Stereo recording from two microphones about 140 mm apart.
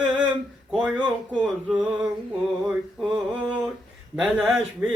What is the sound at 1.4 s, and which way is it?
Mantra, 5° right (ahead or behind).